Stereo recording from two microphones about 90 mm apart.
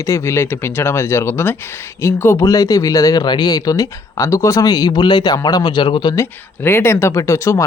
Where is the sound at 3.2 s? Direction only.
55° left (ahead or behind).